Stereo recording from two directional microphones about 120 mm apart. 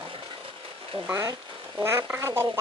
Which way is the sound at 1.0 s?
25° right (ahead or behind).